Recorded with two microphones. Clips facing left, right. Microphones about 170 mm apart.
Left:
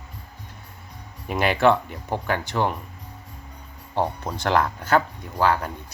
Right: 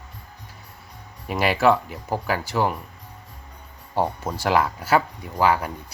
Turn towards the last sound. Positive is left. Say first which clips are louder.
# right 1 dB
turn(degrees=-10)  # may be behind; listen again after turning